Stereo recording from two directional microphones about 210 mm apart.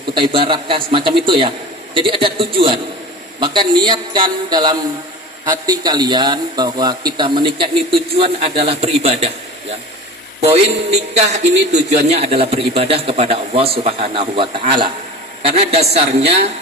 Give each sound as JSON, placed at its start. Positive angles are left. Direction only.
{"t": 0.1, "sound": "a man's voice", "side_deg": -25}
{"t": 11.1, "sound": "a man's voice", "side_deg": -30}